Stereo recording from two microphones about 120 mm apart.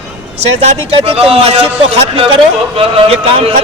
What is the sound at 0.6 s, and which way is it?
Speech, 60° right (ahead or behind).